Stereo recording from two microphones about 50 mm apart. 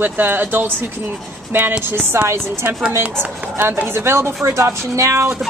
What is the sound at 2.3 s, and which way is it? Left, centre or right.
A woman's voice, right.